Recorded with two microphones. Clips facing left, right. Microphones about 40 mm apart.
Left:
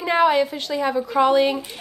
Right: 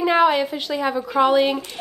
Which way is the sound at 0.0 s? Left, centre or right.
Centre.